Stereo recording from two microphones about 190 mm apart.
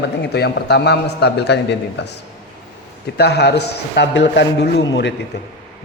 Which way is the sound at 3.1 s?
60° left (ahead or behind).